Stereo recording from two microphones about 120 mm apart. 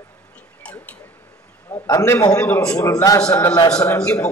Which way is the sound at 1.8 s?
30° left (ahead or behind).